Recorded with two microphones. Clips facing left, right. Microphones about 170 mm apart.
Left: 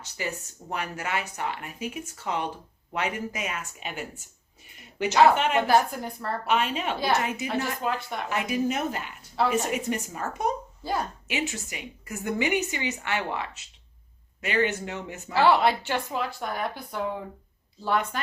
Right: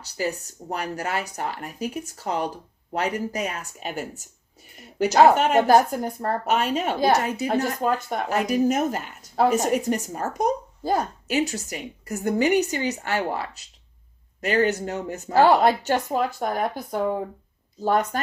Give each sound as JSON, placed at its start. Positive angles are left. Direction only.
{"t": 0.0, "sound": "speech", "side_deg": -35}